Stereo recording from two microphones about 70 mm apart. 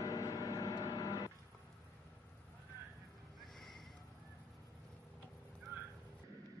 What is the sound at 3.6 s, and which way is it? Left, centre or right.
Horse, centre.